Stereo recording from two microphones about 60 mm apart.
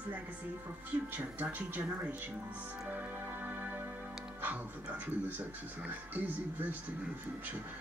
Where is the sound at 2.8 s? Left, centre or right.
Right.